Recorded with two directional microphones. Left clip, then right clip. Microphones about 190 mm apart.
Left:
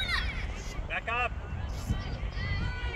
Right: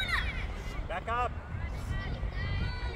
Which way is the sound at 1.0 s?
75° right (ahead or behind).